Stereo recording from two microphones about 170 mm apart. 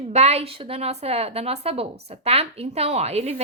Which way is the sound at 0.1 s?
40° right (ahead or behind).